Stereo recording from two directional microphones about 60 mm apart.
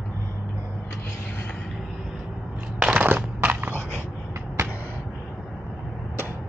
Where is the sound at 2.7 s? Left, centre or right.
Right.